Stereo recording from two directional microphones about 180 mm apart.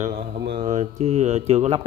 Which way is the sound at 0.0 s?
55° right (ahead or behind).